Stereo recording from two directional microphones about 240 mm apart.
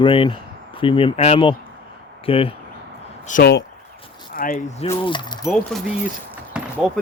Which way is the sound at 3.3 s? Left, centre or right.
Left.